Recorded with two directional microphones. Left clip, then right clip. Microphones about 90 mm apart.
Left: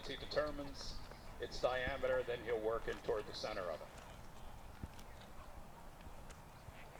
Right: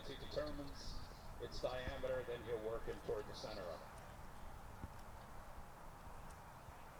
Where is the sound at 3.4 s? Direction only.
25° left (ahead or behind).